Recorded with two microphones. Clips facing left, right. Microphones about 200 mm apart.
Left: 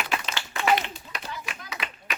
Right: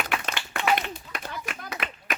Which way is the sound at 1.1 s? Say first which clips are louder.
Even; 55° right (ahead or behind).